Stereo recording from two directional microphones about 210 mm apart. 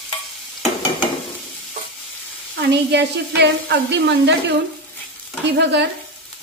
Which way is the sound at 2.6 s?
55° right (ahead or behind).